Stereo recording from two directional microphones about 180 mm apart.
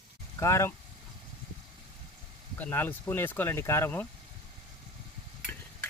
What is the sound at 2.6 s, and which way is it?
Speech, 10° left (ahead or behind).